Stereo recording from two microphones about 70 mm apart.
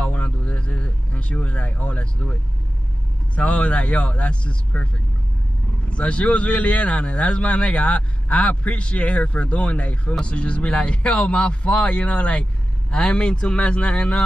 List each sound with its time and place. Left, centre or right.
0.0 s a sound: centre
3.3 s speech: centre
5.9 s speech: centre